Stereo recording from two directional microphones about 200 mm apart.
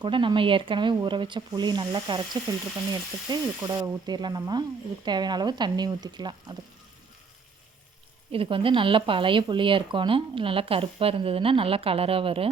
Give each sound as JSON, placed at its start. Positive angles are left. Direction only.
{"t": 0.0, "sound": "speech", "side_deg": -25}
{"t": 8.3, "sound": "speech", "side_deg": -25}